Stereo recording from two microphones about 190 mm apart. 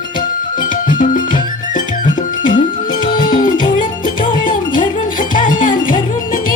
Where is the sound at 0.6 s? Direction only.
45° left (ahead or behind).